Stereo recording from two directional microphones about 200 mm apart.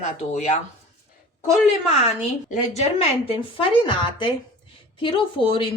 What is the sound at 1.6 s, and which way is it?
A woman's voice, 30° left (ahead or behind).